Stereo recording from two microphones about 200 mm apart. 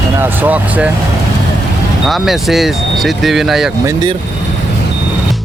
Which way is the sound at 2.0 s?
Centre (ahead or behind).